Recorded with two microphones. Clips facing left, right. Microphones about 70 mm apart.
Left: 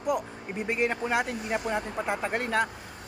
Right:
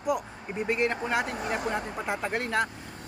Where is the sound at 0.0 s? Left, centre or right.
Centre.